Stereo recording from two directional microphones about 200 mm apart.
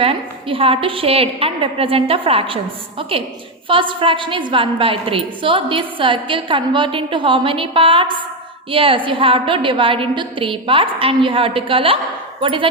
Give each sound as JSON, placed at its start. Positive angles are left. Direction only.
{"t": 0.0, "sound": "a woman's voice", "side_deg": -25}